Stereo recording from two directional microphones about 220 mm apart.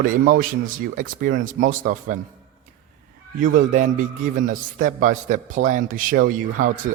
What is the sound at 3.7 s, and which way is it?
Speech, 35° right (ahead or behind).